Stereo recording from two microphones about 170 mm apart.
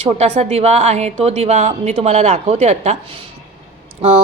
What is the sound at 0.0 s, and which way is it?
Speech, 40° right (ahead or behind).